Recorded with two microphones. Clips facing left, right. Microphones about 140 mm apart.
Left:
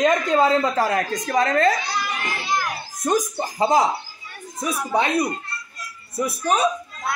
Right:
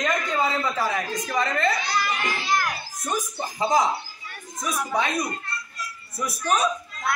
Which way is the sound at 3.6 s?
30° left (ahead or behind).